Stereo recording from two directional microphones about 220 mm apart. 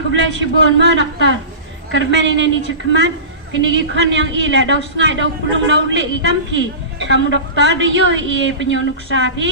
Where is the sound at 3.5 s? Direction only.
55° right (ahead or behind).